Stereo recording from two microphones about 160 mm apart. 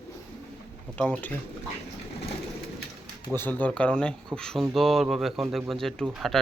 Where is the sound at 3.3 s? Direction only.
10° left (ahead or behind).